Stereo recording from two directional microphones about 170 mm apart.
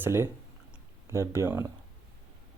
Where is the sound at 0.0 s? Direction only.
15° right (ahead or behind).